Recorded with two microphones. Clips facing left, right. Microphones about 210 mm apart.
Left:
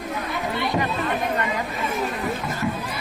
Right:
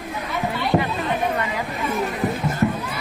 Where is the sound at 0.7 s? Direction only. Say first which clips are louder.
Right 6 dB; 55° right (ahead or behind).